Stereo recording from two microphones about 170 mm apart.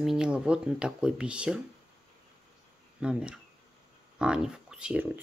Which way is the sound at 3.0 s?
5° right (ahead or behind).